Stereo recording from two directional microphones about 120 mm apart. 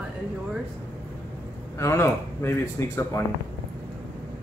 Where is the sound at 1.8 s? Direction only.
20° left (ahead or behind).